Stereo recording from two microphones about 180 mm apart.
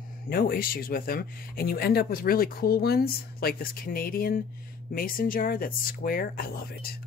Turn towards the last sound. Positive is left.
turn(degrees=55)  # may be behind; listen again after turning